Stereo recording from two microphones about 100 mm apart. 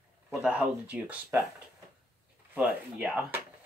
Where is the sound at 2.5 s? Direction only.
10° right (ahead or behind).